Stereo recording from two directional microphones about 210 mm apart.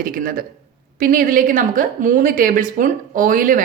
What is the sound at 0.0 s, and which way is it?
A woman's voice, 40° right (ahead or behind).